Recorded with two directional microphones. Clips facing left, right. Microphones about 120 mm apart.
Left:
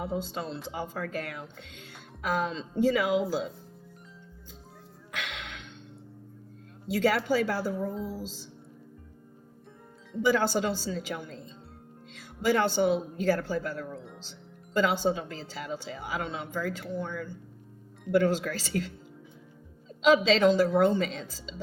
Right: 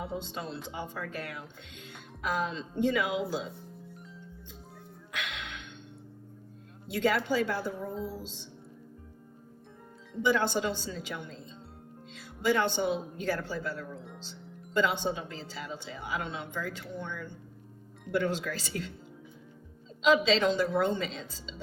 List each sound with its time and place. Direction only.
0.0 s speech: 40° left (ahead or behind)
5.1 s music: 40° left (ahead or behind)
6.9 s speech: 40° left (ahead or behind)
10.2 s a woman's voice: 40° left (ahead or behind)
20.0 s a woman's voice: 40° left (ahead or behind)